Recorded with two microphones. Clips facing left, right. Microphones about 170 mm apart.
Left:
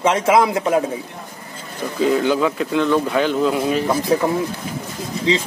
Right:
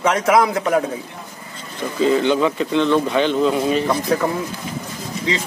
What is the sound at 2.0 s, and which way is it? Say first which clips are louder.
Speech: right 1 dB; 5° left (ahead or behind).